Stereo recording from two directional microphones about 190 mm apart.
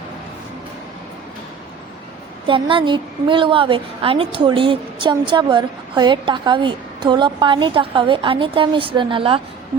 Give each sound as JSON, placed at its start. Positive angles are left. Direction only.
{"t": 2.5, "sound": "a woman's voice", "side_deg": -25}